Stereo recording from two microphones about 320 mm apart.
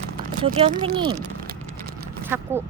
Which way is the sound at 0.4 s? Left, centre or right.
Centre.